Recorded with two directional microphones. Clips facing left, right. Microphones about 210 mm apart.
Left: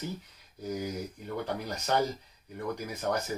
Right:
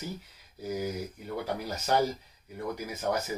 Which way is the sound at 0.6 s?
5° right (ahead or behind).